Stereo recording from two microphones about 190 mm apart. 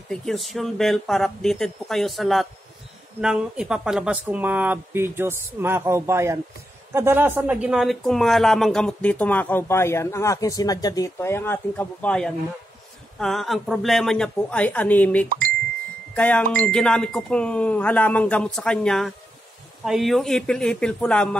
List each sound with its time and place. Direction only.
0.1 s a man's voice: centre (ahead or behind)
15.2 s speech: 45° right (ahead or behind)
16.2 s speech: 10° left (ahead or behind)